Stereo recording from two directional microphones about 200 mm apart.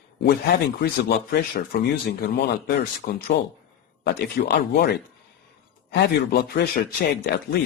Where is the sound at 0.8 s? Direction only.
50° left (ahead or behind).